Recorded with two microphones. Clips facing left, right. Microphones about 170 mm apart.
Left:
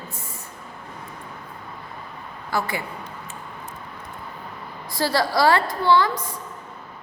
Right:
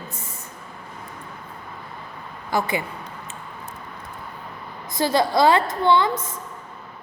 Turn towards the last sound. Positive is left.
turn(degrees=-20)  # may be behind; listen again after turning